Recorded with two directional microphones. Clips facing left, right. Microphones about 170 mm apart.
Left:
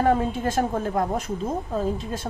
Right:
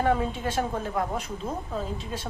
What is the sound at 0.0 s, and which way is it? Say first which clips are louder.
A woman's voice: left 4 dB; 45° left (ahead or behind).